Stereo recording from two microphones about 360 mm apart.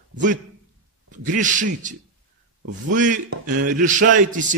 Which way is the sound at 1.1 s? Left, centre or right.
Right.